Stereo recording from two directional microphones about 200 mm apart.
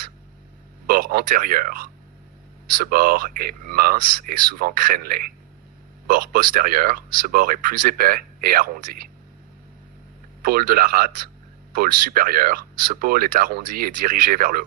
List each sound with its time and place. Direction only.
0.9 s speech: 45° right (ahead or behind)
10.4 s speech: 45° right (ahead or behind)